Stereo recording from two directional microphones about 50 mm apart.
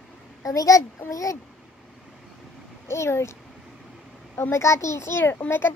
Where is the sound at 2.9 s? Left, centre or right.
Left.